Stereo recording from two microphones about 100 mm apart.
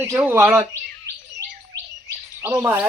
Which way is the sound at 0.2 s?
20° right (ahead or behind).